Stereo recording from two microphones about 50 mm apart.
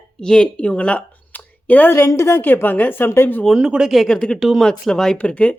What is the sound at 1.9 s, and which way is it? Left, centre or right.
Speech, left.